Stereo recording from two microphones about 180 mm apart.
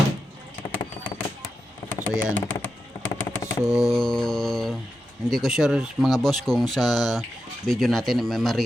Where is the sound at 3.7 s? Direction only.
Centre (ahead or behind).